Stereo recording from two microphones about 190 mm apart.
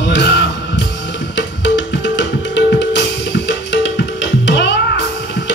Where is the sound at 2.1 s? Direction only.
70° left (ahead or behind).